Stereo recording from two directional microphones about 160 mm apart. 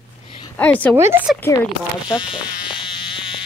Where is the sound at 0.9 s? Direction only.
15° right (ahead or behind).